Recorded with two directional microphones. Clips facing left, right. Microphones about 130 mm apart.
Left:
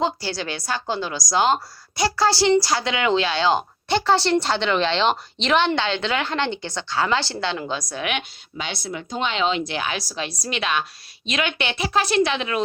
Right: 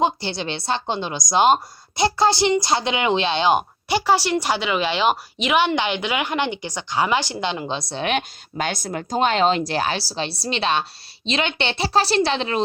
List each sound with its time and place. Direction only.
0.0 s a woman's voice: 20° right (ahead or behind)
8.5 s speech: 45° right (ahead or behind)